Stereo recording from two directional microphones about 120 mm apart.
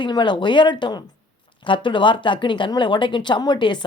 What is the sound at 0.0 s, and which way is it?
A woman's voice, 40° left (ahead or behind).